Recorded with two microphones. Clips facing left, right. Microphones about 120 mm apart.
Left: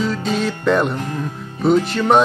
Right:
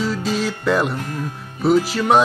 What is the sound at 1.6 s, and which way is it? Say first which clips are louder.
Music: left 1 dB; 5° right (ahead or behind).